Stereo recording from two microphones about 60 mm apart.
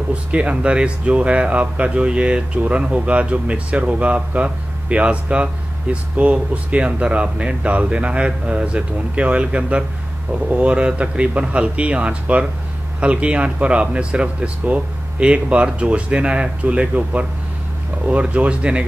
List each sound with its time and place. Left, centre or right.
0.1 s speech: right